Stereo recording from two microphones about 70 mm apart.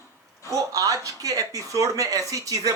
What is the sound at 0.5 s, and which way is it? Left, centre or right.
Speech, right.